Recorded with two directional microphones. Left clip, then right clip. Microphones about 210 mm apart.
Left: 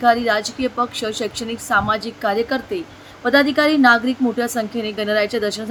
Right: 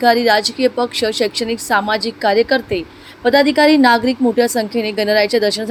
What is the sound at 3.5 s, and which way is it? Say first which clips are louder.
A woman's voice: right 3 dB; 30° left (ahead or behind).